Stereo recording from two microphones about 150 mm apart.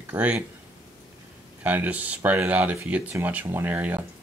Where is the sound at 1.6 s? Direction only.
10° right (ahead or behind).